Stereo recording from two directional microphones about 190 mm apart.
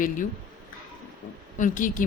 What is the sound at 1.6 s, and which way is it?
Speech, 45° left (ahead or behind).